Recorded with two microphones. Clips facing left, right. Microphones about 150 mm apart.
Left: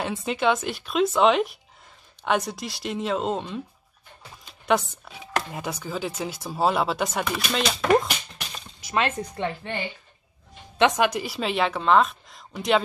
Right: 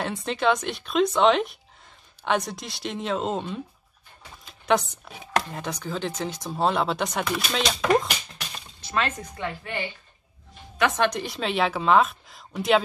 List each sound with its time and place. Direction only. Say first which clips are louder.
0.0 s speech: even; centre (ahead or behind)
4.5 s a sound: even; centre (ahead or behind)
5.5 s speech: even; 5° left (ahead or behind)
8.8 s speech: left 2 dB; 20° left (ahead or behind)
11.0 s speech: left 1 dB; 5° left (ahead or behind)